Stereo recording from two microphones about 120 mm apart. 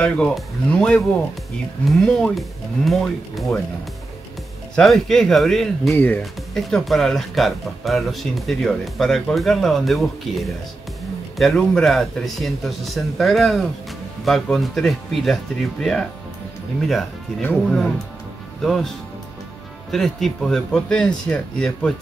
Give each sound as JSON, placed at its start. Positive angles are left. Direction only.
{"t": 0.0, "sound": "speech", "side_deg": 10}
{"t": 4.7, "sound": "speech", "side_deg": 0}
{"t": 5.9, "sound": "speech", "side_deg": 15}
{"t": 6.5, "sound": "speech", "side_deg": 0}
{"t": 17.4, "sound": "speech", "side_deg": 15}
{"t": 18.6, "sound": "speech", "side_deg": 0}